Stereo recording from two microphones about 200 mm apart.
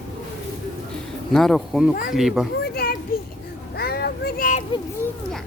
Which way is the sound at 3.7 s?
50° left (ahead or behind).